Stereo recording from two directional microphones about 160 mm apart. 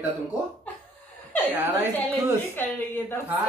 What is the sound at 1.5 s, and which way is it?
Speech, 10° right (ahead or behind).